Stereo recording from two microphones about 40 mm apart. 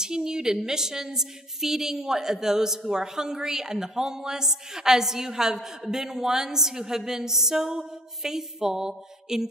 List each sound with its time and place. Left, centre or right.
0.0 s a woman's voice: centre